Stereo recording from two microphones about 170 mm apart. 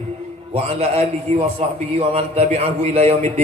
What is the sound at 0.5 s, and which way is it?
A man's voice, 40° right (ahead or behind).